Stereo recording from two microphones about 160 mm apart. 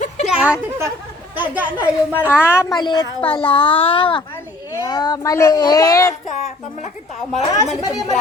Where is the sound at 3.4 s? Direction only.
30° left (ahead or behind).